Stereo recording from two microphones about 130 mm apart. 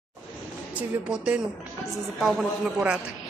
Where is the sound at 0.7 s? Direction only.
10° right (ahead or behind).